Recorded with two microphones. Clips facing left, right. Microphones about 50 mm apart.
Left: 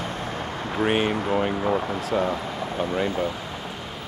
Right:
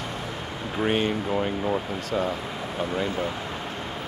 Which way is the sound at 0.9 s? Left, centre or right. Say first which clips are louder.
Left 2 dB; centre.